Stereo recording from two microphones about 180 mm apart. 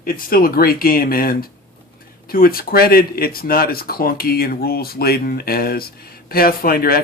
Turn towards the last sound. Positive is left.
turn(degrees=55)  # may be behind; listen again after turning